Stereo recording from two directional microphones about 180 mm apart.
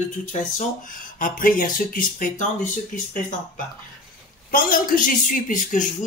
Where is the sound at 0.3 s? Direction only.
40° left (ahead or behind).